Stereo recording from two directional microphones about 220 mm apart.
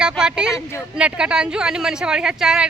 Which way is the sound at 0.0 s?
5° right (ahead or behind).